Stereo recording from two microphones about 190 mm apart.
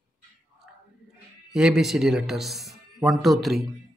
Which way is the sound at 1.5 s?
5° right (ahead or behind).